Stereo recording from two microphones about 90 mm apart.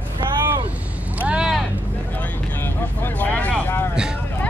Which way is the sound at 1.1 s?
15° right (ahead or behind).